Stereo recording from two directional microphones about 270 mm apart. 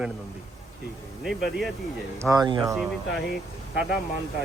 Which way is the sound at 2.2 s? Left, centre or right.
Centre.